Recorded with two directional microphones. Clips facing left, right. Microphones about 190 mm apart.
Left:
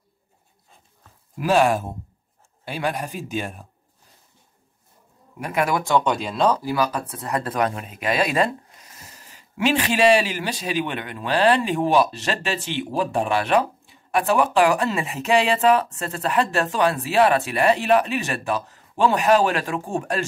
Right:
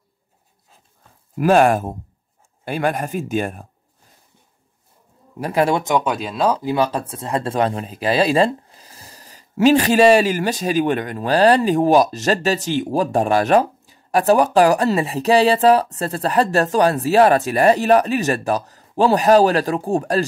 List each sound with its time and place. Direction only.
1.4 s speech: 50° right (ahead or behind)
5.4 s speech: 30° right (ahead or behind)
5.9 s speech: 5° right (ahead or behind)
6.6 s speech: 25° right (ahead or behind)